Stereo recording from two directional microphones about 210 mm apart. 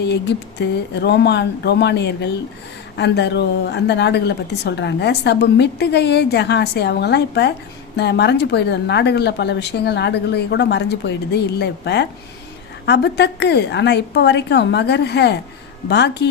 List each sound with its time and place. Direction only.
0.0 s a woman's voice: 55° left (ahead or behind)